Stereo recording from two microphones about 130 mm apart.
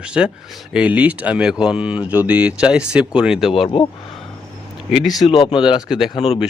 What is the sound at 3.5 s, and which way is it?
Speech, 45° left (ahead or behind).